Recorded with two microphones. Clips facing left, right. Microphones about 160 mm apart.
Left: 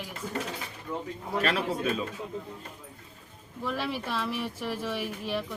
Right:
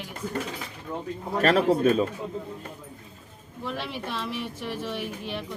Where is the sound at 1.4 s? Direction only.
45° right (ahead or behind).